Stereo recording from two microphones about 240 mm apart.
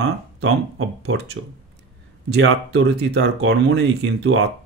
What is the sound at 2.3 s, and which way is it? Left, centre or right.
Speech, right.